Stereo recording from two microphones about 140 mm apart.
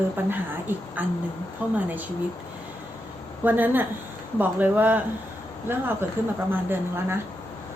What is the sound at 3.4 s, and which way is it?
A woman's voice, 15° right (ahead or behind).